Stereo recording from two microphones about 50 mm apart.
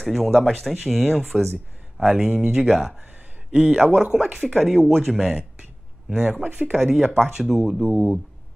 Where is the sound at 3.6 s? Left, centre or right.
Centre.